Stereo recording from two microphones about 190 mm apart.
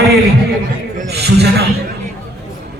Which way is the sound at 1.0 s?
60° right (ahead or behind).